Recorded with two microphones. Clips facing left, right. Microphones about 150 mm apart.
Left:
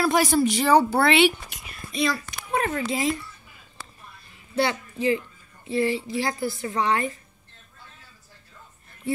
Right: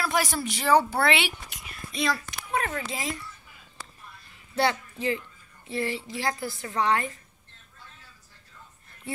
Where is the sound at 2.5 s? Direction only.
30° left (ahead or behind).